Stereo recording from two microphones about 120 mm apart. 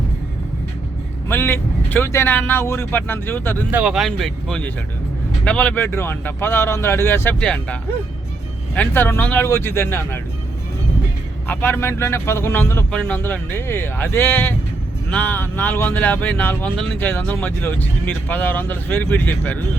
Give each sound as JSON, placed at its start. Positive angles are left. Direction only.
{"t": 1.3, "sound": "speech", "side_deg": 20}
{"t": 3.7, "sound": "speech", "side_deg": -15}
{"t": 3.9, "sound": "speech", "side_deg": 0}
{"t": 7.3, "sound": "speech", "side_deg": 10}
{"t": 11.4, "sound": "speech", "side_deg": 15}